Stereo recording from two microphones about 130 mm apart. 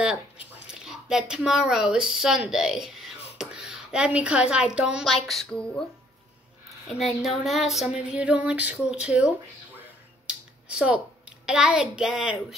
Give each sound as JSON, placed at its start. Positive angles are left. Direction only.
{"t": 0.7, "sound": "speech", "side_deg": -5}
{"t": 7.2, "sound": "a sound", "side_deg": 0}
{"t": 10.2, "sound": "speech", "side_deg": -10}